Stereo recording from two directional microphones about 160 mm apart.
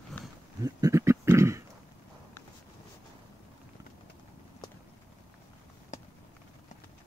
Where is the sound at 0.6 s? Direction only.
20° right (ahead or behind).